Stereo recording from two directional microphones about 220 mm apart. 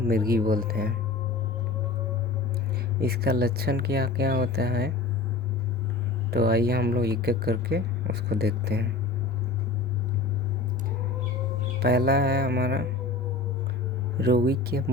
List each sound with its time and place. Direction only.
0.0 s speech: 40° right (ahead or behind)
3.0 s speech: 45° right (ahead or behind)
6.3 s speech: 45° right (ahead or behind)
11.8 s speech: 45° right (ahead or behind)
14.2 s speech: 45° right (ahead or behind)